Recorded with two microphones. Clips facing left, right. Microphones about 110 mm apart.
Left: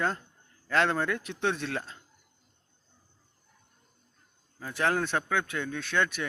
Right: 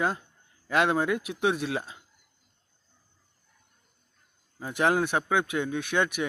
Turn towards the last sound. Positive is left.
turn(degrees=-15)  # may be behind; listen again after turning